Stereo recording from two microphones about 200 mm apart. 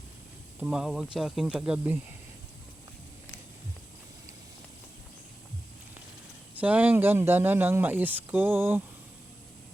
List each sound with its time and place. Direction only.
0.6 s speech: 5° right (ahead or behind)
6.6 s speech: 10° right (ahead or behind)